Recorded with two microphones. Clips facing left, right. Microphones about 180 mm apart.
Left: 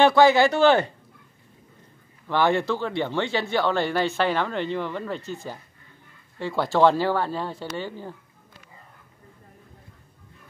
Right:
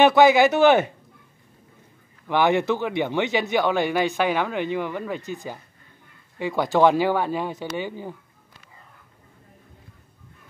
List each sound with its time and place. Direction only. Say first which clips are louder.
0.0 s speech: right 1 dB; 20° right (ahead or behind)
2.2 s speech: right 2 dB; 15° right (ahead or behind)